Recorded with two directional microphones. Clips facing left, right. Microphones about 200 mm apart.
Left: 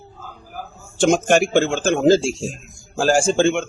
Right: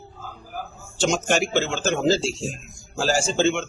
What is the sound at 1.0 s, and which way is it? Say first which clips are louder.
Speech: left 6 dB; 55° left (ahead or behind).